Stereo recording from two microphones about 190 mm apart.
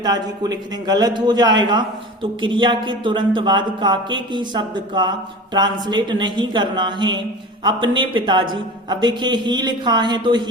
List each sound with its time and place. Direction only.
0.0 s a man's voice: 20° right (ahead or behind)